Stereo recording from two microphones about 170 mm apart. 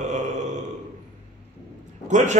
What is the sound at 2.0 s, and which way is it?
Speech, 45° right (ahead or behind).